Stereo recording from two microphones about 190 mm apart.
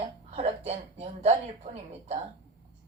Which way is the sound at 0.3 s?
35° right (ahead or behind).